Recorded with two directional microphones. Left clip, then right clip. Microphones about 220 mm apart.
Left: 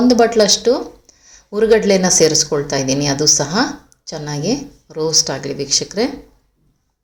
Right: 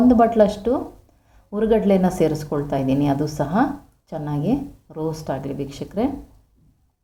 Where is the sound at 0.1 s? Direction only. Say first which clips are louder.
Left 4 dB; 20° left (ahead or behind).